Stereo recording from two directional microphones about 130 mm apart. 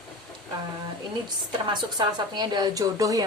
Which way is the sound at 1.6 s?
35° right (ahead or behind).